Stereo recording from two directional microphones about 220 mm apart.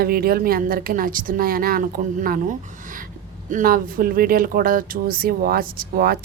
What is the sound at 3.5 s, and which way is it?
Speech, 40° right (ahead or behind).